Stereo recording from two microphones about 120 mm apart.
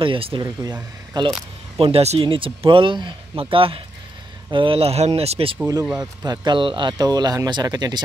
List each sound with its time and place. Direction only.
0.0 s speech: 45° right (ahead or behind)
1.1 s speech: 35° right (ahead or behind)
1.8 s speech: 55° right (ahead or behind)
5.9 s speech: 35° right (ahead or behind)